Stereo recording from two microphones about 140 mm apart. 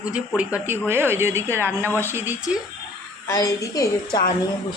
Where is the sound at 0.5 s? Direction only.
15° right (ahead or behind).